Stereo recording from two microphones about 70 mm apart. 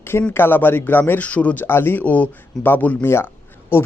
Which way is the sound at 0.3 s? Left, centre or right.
Left.